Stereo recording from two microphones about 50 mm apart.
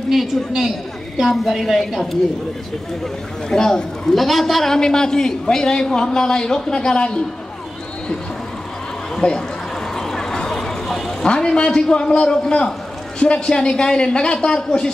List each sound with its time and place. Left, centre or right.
0.1 s a woman's voice: centre
3.4 s a woman's voice: centre
4.7 s a man's voice: centre
9.1 s a sound: centre
13.2 s a man's voice: centre